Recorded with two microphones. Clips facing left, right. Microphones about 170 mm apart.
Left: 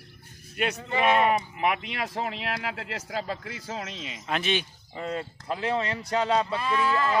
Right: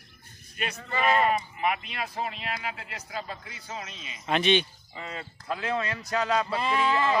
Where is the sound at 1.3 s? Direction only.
75° left (ahead or behind); by 4.2 s 90° left.